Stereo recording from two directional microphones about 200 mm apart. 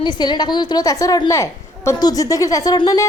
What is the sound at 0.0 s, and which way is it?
A woman's voice, 20° left (ahead or behind).